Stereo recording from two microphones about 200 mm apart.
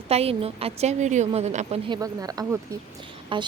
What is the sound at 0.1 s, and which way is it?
A woman's voice, 30° right (ahead or behind).